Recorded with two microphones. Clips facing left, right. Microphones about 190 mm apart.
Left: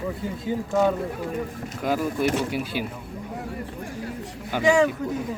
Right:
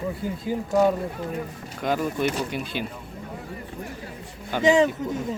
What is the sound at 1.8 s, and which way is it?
Speech, 5° left (ahead or behind).